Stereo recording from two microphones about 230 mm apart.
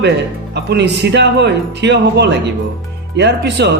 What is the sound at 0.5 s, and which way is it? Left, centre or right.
Speech, right.